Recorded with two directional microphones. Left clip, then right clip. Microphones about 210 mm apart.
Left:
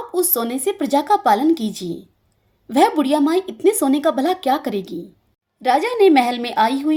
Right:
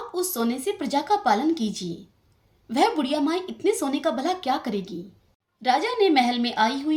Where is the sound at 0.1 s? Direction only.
40° left (ahead or behind).